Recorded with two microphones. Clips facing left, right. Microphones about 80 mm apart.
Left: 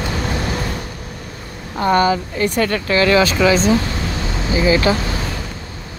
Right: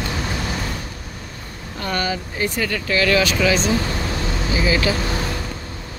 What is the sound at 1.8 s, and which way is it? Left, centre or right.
Speech, left.